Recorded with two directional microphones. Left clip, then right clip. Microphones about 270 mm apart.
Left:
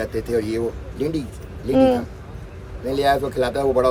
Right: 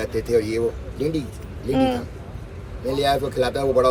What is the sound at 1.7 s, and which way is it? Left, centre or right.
Speech, centre.